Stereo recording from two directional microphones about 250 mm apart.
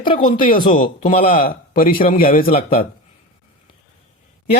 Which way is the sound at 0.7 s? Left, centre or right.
Left.